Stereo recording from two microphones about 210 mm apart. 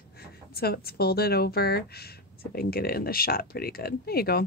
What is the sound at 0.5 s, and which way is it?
Speech, 50° left (ahead or behind).